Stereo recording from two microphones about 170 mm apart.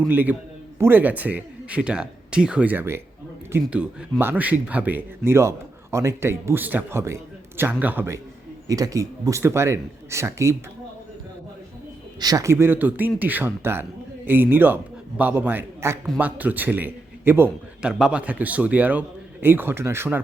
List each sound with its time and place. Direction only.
0.1 s a man's voice: 10° right (ahead or behind)
12.2 s a man's voice: 20° right (ahead or behind)